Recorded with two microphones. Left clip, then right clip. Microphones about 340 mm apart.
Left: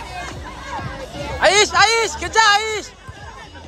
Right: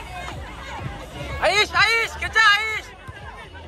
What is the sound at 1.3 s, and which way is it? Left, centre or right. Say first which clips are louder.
Music: left 5 dB; left.